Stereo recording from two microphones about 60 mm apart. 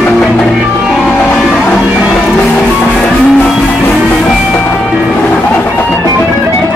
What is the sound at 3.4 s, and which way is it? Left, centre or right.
Music, centre.